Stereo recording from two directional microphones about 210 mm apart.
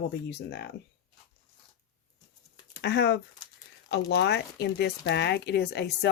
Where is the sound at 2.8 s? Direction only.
50° left (ahead or behind).